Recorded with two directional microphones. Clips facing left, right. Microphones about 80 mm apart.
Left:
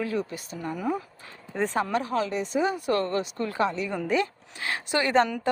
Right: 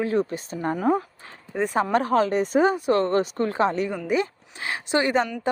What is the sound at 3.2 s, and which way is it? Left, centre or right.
Speech, right.